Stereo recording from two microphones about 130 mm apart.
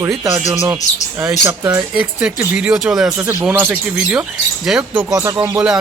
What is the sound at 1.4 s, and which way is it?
Music, 20° right (ahead or behind).